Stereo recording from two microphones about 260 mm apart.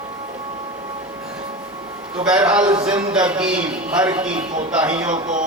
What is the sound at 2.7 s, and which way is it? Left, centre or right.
Speech, right.